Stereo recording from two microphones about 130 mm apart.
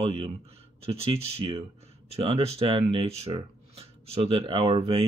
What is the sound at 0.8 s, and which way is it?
Speech, 45° right (ahead or behind).